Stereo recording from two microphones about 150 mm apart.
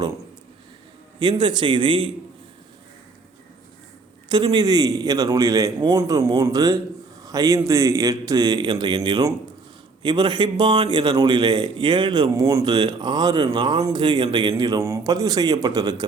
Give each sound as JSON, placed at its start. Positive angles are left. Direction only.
{"t": 1.2, "sound": "speech", "side_deg": -30}
{"t": 4.3, "sound": "a man's voice", "side_deg": -30}